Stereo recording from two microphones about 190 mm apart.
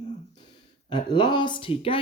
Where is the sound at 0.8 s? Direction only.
25° left (ahead or behind).